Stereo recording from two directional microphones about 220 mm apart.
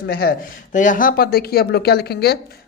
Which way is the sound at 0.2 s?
40° left (ahead or behind).